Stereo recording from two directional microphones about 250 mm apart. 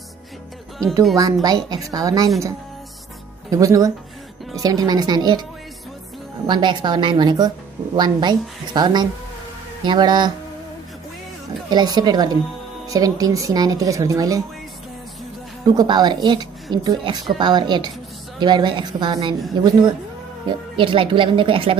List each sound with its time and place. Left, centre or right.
1.1 s a woman's voice: centre
3.4 s a woman's voice: centre
6.4 s a woman's voice: centre
11.7 s a woman's voice: centre
15.6 s a woman's voice: centre